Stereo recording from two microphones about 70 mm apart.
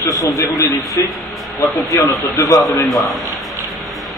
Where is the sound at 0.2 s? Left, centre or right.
Left.